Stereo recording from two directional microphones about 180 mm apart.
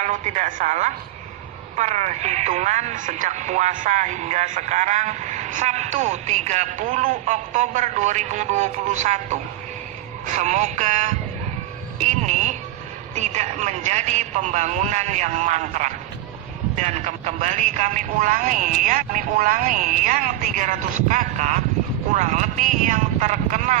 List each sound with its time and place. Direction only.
0.0 s speech: 40° right (ahead or behind)
12.0 s a sound: 40° right (ahead or behind)
13.1 s speech: 40° right (ahead or behind)